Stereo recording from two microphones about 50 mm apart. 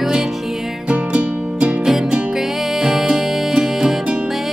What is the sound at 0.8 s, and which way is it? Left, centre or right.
Music, right.